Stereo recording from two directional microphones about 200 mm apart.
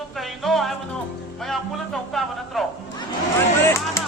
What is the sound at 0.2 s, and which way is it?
Music, centre (ahead or behind).